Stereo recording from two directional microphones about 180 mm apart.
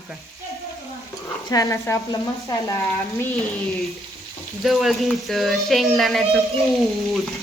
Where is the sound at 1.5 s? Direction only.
15° left (ahead or behind).